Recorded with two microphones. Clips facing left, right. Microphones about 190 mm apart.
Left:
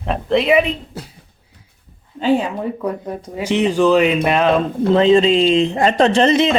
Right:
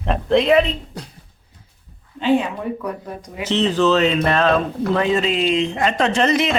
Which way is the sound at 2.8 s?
25° left (ahead or behind).